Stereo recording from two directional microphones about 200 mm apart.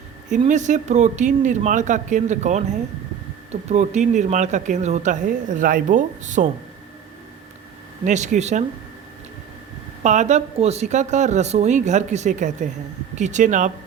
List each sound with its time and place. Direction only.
0.3 s speech: 35° right (ahead or behind)
8.0 s speech: 35° right (ahead or behind)
10.0 s speech: 35° right (ahead or behind)